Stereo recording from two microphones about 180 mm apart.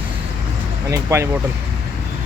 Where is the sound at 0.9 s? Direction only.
15° right (ahead or behind).